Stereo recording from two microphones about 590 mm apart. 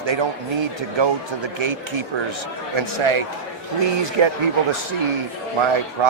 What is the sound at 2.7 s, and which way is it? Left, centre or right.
Speech, right.